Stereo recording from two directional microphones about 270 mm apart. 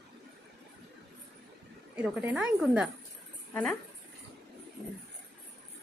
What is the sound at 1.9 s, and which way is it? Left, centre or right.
A woman's voice, centre.